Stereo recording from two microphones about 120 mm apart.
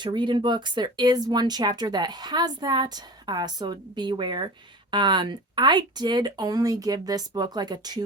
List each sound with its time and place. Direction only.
0.0 s speech: 40° right (ahead or behind)